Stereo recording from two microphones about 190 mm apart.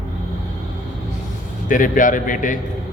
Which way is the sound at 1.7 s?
45° left (ahead or behind).